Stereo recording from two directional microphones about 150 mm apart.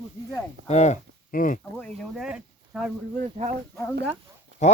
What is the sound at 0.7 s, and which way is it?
Speech, 50° left (ahead or behind).